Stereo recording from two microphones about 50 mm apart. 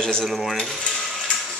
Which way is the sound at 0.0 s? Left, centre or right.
Centre.